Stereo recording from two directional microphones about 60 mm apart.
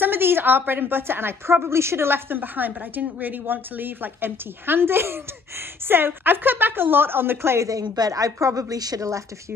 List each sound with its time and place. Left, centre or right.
0.0 s a woman's voice: right
7.6 s a woman's voice: right